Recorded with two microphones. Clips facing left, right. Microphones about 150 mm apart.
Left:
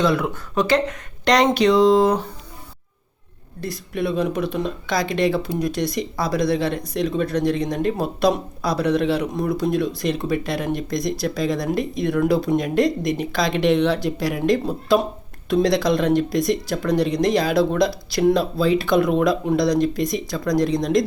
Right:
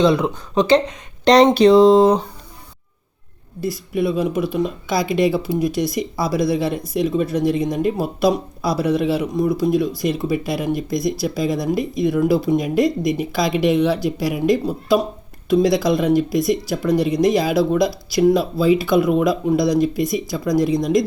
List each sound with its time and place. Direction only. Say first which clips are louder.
0.0 s speech: right 4 dB; 20° right (ahead or behind)
3.6 s speech: right 4 dB; 5° right (ahead or behind)